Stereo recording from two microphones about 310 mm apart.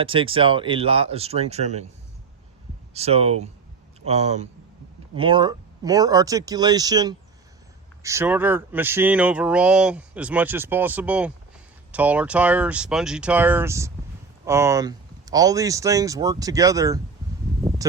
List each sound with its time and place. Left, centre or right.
0.0 s speech: centre
2.9 s speech: centre